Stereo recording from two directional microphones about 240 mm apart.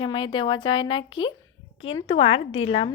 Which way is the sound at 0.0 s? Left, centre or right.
Centre.